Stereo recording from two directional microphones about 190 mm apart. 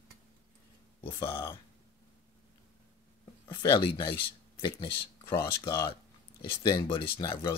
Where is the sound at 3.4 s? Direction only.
25° left (ahead or behind).